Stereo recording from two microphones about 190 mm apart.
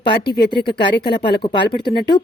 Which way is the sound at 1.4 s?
25° left (ahead or behind).